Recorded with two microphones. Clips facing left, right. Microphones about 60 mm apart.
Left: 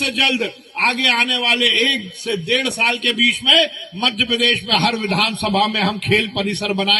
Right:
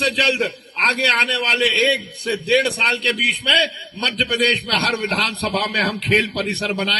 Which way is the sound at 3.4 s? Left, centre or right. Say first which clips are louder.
Left 1 dB; right.